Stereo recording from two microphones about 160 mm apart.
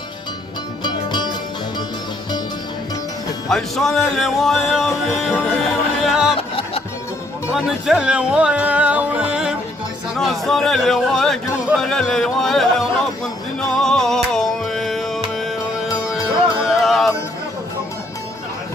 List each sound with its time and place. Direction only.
0.9 s music: 25° left (ahead or behind)
3.5 s speech: centre (ahead or behind)
5.3 s music: 5° left (ahead or behind)
6.3 s music: 35° left (ahead or behind)
7.5 s music: 5° right (ahead or behind)
10.2 s speech: centre (ahead or behind)
13.6 s music: 5° left (ahead or behind)
16.6 s music: centre (ahead or behind)